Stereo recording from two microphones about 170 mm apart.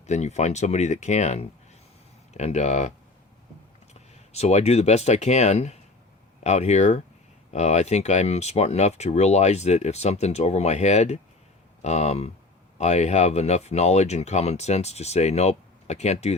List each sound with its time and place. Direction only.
0.0 s speech: 40° left (ahead or behind)
4.1 s speech: 40° left (ahead or behind)